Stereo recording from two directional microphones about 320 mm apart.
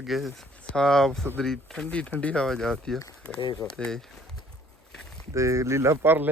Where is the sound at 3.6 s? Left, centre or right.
Centre.